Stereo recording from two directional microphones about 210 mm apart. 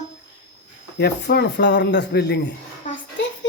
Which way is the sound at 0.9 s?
50° left (ahead or behind).